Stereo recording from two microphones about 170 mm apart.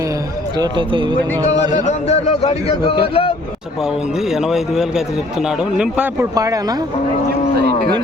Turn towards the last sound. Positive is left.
turn(degrees=-70)  # may be behind; listen again after turning